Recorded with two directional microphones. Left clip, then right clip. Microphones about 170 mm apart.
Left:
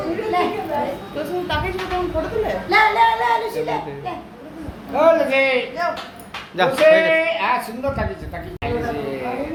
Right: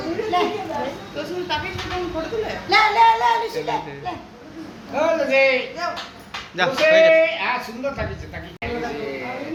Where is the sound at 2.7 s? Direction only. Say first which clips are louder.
Right 1 dB; 45° right (ahead or behind).